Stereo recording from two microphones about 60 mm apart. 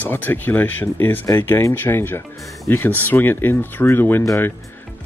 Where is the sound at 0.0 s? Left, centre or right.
Left.